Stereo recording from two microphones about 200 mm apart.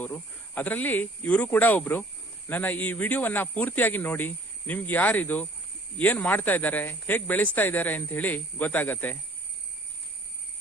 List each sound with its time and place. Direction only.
0.0 s speech: 10° left (ahead or behind)